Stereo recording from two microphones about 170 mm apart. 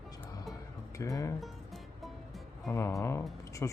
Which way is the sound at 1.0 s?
20° left (ahead or behind).